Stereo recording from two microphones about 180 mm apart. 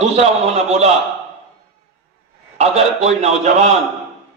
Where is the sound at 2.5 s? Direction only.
40° right (ahead or behind).